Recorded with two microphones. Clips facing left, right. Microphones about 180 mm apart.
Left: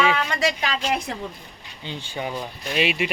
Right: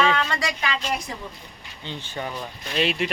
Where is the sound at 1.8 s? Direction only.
15° left (ahead or behind).